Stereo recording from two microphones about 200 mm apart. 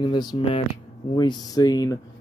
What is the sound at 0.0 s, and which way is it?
Speech, 20° left (ahead or behind).